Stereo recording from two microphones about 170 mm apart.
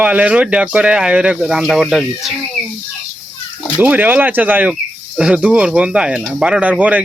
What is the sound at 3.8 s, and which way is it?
Speech, 10° right (ahead or behind).